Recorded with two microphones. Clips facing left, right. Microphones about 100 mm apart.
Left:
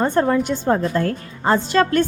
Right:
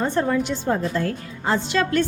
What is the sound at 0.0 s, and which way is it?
A woman's voice, 50° left (ahead or behind).